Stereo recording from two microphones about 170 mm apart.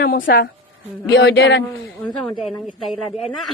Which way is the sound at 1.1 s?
90° left.